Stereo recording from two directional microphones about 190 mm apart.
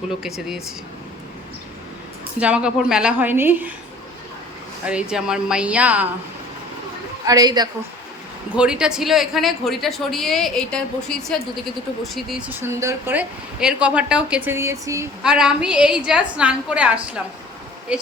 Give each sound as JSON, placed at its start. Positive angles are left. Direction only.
{"t": 0.2, "sound": "speech", "side_deg": 0}
{"t": 2.4, "sound": "speech", "side_deg": -5}
{"t": 4.9, "sound": "speech", "side_deg": -5}
{"t": 7.3, "sound": "a woman's voice", "side_deg": -20}
{"t": 8.5, "sound": "speech", "side_deg": -5}
{"t": 15.2, "sound": "speech", "side_deg": -5}